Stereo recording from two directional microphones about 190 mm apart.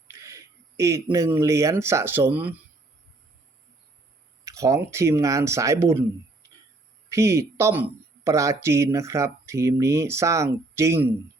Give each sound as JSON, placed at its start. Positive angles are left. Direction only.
{"t": 0.1, "sound": "a sound", "side_deg": -15}
{"t": 1.1, "sound": "speech", "side_deg": -15}
{"t": 4.4, "sound": "speech", "side_deg": -15}
{"t": 7.1, "sound": "speech", "side_deg": -15}